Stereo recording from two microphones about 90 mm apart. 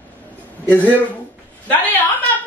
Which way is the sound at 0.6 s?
20° left (ahead or behind).